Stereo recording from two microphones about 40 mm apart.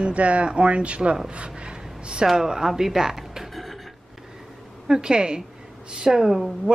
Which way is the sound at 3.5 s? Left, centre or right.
Centre.